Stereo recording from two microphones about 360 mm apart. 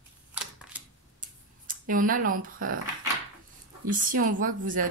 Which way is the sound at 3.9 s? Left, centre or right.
Right.